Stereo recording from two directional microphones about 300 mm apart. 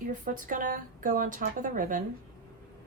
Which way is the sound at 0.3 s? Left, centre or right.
Right.